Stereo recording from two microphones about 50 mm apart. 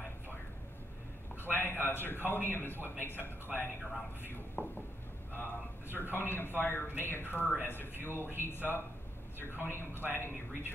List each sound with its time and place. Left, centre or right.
1.4 s a sound: left
1.9 s a man's voice: left
3.5 s speech: centre
4.2 s a man's voice: left